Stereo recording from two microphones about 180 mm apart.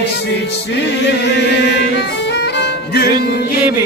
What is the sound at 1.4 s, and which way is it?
Music, 70° left (ahead or behind).